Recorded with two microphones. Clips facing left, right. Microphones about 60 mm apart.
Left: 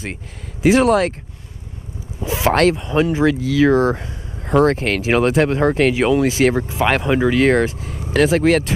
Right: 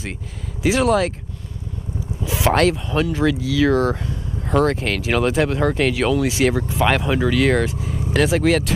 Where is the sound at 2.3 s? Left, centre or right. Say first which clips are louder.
Left 2 dB; centre.